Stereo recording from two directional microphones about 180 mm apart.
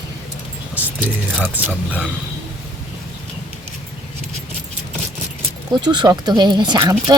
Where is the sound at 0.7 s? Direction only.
10° right (ahead or behind).